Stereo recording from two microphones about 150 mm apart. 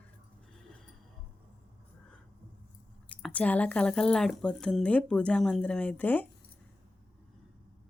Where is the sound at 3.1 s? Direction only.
10° left (ahead or behind).